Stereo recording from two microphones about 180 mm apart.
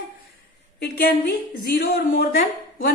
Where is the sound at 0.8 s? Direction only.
65° left (ahead or behind).